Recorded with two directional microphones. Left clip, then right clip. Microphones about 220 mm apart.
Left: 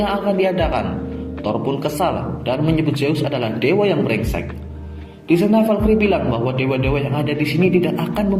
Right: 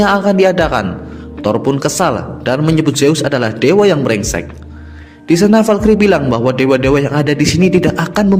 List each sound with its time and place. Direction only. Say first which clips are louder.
0.0 s speech: right 8 dB; 50° right (ahead or behind)